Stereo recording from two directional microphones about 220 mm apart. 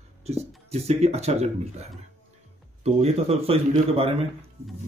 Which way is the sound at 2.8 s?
30° right (ahead or behind).